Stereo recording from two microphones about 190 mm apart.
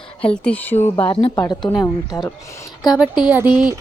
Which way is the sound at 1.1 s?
25° left (ahead or behind).